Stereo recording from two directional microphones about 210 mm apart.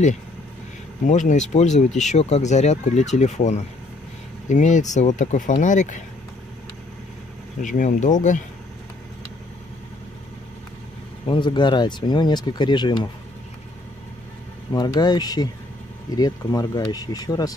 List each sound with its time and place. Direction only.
1.0 s speech: 35° left (ahead or behind)
7.6 s speech: 35° left (ahead or behind)
11.2 s speech: 20° left (ahead or behind)
14.7 s speech: 20° left (ahead or behind)